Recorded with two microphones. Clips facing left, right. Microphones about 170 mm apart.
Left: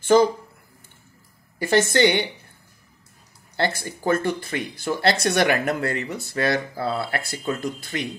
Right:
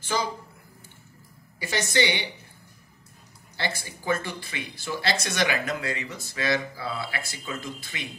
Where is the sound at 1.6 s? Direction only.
50° left (ahead or behind).